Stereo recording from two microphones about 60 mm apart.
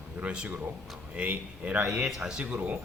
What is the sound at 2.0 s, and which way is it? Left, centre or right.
Speech, centre.